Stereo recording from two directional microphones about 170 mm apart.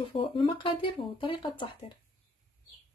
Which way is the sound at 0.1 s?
30° left (ahead or behind).